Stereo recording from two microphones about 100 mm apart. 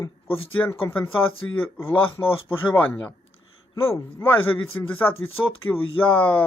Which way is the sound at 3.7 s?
30° left (ahead or behind).